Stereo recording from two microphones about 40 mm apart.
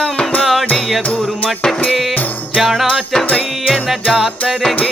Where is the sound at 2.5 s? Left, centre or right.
Centre.